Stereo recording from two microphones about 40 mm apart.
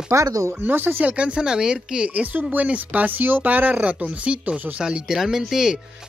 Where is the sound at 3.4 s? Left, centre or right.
Right.